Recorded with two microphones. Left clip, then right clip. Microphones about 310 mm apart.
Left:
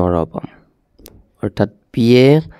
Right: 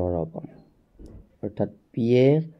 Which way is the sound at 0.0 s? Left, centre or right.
Left.